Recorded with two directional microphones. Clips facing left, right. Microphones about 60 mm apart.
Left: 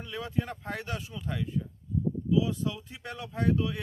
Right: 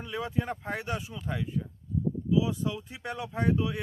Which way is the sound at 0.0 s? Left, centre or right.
Centre.